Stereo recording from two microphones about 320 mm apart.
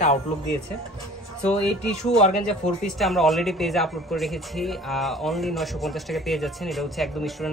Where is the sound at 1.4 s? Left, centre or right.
Centre.